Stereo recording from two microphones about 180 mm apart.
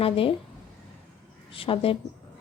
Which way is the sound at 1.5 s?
30° left (ahead or behind).